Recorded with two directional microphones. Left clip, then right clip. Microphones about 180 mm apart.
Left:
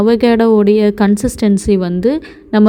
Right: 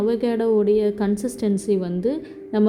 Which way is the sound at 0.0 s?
50° left (ahead or behind).